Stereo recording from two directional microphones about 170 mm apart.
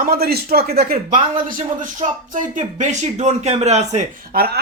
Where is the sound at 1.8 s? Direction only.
50° right (ahead or behind).